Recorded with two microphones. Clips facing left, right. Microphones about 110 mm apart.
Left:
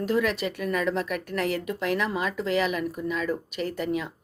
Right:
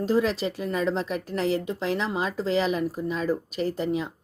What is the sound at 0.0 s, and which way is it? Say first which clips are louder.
Speech: right 2 dB; 30° right (ahead or behind).